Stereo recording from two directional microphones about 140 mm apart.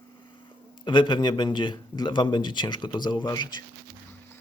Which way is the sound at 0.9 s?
35° left (ahead or behind).